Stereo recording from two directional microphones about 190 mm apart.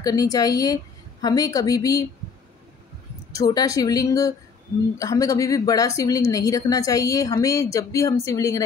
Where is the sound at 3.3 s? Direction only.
20° left (ahead or behind).